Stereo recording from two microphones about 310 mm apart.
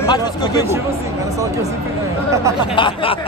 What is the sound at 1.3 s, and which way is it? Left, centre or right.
Speech, centre.